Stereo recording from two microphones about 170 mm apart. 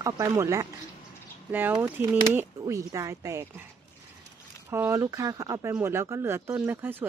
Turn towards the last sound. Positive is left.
turn(degrees=-10)  # may be behind; listen again after turning